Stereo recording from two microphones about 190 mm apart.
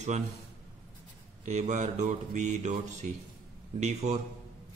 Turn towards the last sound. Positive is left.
turn(degrees=-35)  # may be behind; listen again after turning